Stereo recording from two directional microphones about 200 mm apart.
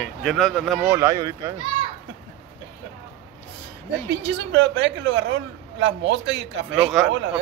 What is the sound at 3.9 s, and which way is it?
Speech, 60° right (ahead or behind).